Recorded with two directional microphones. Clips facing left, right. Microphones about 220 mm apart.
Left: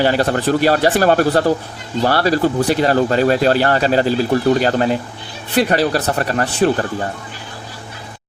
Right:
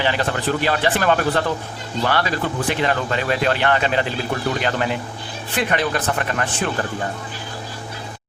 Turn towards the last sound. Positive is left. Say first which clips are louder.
# left 7 dB
turn(degrees=35)  # may be behind; listen again after turning